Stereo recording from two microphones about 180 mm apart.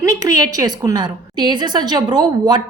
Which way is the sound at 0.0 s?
20° right (ahead or behind).